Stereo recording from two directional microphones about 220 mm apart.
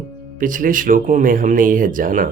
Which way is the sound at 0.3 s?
35° right (ahead or behind).